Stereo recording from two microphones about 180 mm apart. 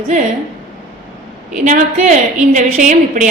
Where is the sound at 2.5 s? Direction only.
40° right (ahead or behind).